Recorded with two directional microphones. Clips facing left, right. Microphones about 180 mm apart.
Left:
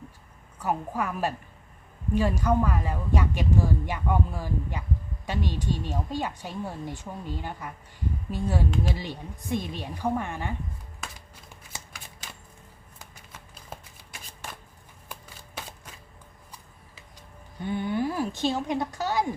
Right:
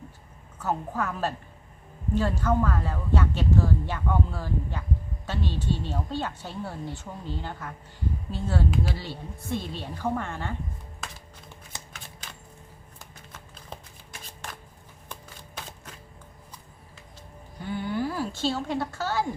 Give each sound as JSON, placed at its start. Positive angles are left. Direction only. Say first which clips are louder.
{"t": 0.6, "sound": "speech", "louder": "even", "side_deg": 10}
{"t": 13.3, "sound": "shuffling cards", "louder": "even", "side_deg": 10}
{"t": 17.6, "sound": "a woman's voice", "louder": "left 2 dB", "side_deg": 20}